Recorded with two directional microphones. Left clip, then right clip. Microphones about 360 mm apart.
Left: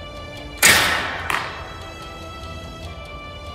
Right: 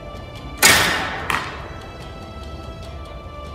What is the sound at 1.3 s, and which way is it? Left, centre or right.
Music, right.